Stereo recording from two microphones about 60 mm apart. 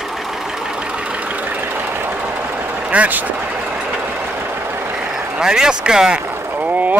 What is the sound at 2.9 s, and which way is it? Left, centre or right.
Speech, right.